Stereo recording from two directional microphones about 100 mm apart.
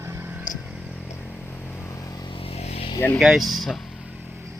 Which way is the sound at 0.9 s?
10° left (ahead or behind).